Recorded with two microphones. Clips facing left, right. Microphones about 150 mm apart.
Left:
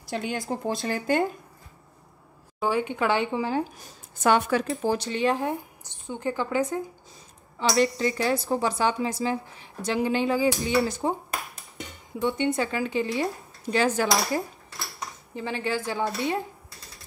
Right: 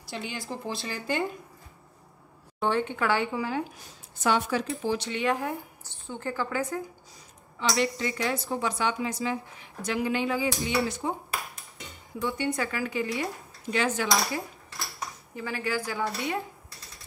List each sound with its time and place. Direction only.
0.1 s speech: 45° left (ahead or behind)
2.6 s speech: 10° left (ahead or behind); by 3.6 s 30° left (ahead or behind)
4.2 s speech: 55° left (ahead or behind); by 6.8 s 20° left (ahead or behind)
7.7 s speech: 35° left (ahead or behind)
12.2 s speech: 25° left (ahead or behind); by 14.4 s 40° left (ahead or behind)
15.3 s speech: 25° left (ahead or behind)